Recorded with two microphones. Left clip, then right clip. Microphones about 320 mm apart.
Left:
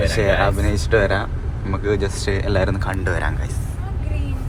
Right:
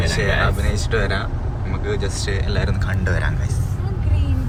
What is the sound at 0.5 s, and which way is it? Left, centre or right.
Speech, centre.